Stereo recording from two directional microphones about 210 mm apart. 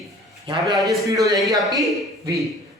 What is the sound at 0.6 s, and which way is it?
Speech, centre (ahead or behind).